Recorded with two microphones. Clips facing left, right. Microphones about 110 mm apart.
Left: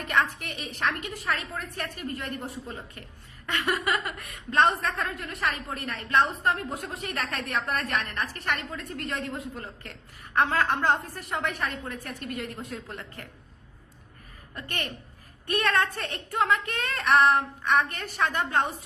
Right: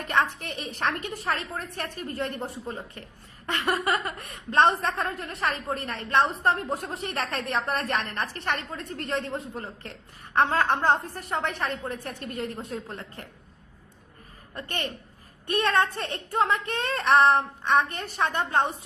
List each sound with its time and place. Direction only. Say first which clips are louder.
0.1 s a woman's voice: right 1 dB; 30° right (ahead or behind)
3.7 s a woman's voice: right 2 dB; 30° right (ahead or behind)
14.5 s speech: right 2 dB; 30° right (ahead or behind)